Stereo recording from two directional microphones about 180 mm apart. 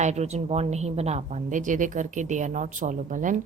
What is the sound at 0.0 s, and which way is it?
A woman's voice, 40° right (ahead or behind).